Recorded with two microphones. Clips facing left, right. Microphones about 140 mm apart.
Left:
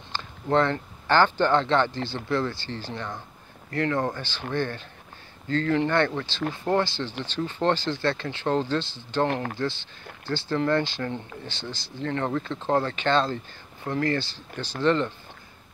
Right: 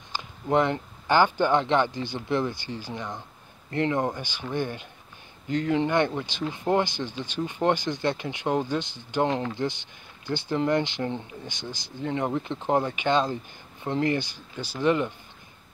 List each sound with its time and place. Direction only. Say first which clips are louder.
0.1 s speech: even; 15° right (ahead or behind)
9.3 s speech: right 1 dB; 60° left (ahead or behind)
9.6 s speech: even; 15° right (ahead or behind)